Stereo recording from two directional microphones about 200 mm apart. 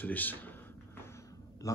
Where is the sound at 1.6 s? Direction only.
15° left (ahead or behind).